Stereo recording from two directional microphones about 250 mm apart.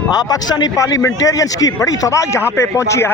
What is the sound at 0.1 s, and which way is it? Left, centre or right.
A man's voice, centre.